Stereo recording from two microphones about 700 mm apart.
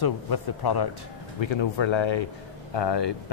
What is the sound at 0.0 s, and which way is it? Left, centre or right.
Speech, left.